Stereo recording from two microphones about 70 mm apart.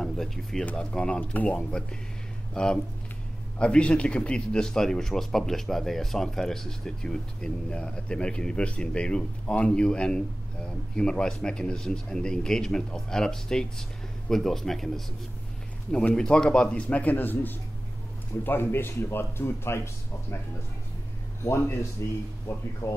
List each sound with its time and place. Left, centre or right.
0.0 s a man's voice: centre
1.2 s a man's voice: left; by 15.0 s centre
16.2 s speech: centre; by 20.3 s left
22.0 s speech: left